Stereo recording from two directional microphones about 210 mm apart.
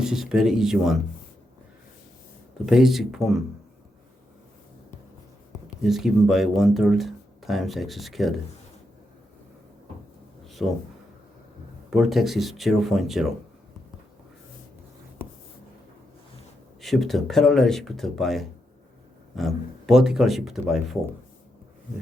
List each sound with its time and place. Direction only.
0.0 s speech: 5° right (ahead or behind)
2.6 s speech: centre (ahead or behind)
5.8 s speech: centre (ahead or behind)
10.4 s a sound: centre (ahead or behind)
11.9 s speech: centre (ahead or behind)
16.8 s speech: centre (ahead or behind)